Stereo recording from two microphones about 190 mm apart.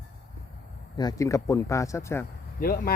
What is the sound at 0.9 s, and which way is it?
Speech, 20° left (ahead or behind).